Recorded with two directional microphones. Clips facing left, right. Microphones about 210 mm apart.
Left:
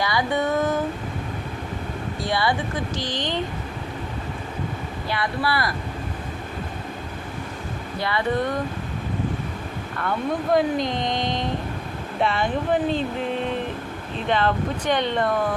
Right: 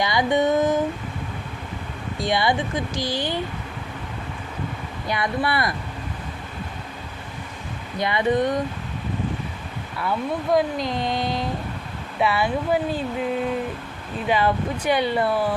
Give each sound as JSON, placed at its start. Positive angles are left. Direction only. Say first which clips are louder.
{"t": 0.0, "sound": "a sound", "louder": "right 3 dB", "side_deg": -20}
{"t": 2.2, "sound": "speech", "louder": "right 2 dB", "side_deg": -15}
{"t": 5.0, "sound": "a sound", "louder": "right 2 dB", "side_deg": -20}
{"t": 7.9, "sound": "speech", "louder": "right 3 dB", "side_deg": -20}
{"t": 10.0, "sound": "speech", "louder": "even", "side_deg": -5}
{"t": 14.3, "sound": "speech", "louder": "right 1 dB", "side_deg": -10}